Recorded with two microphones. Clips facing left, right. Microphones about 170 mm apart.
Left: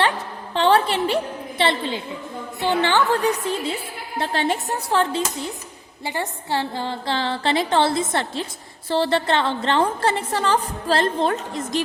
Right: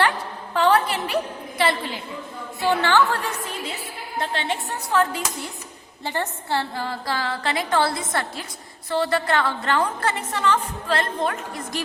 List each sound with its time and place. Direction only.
0.5 s a woman's voice: 25° left (ahead or behind)
4.2 s a woman's voice: 40° left (ahead or behind)
6.1 s a woman's voice: 15° left (ahead or behind)